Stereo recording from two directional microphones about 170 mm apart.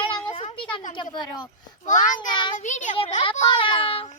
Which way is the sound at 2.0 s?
25° left (ahead or behind).